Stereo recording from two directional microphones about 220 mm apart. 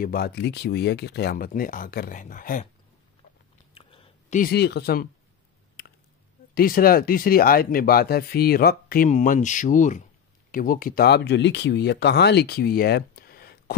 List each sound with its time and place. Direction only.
0.0 s speech: 45° left (ahead or behind)
3.7 s whispering: 25° left (ahead or behind)
4.4 s speech: 45° left (ahead or behind)
5.8 s a sound: 45° left (ahead or behind)
6.5 s speech: 40° left (ahead or behind)